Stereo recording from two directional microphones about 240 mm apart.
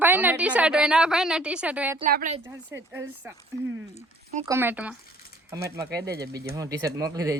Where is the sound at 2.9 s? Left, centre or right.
Centre.